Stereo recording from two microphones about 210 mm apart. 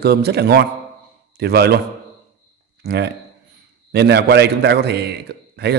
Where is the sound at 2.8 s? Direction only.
50° right (ahead or behind).